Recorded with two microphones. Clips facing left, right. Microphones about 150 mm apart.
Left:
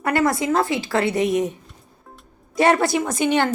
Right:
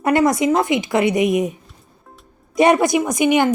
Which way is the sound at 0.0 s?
20° right (ahead or behind).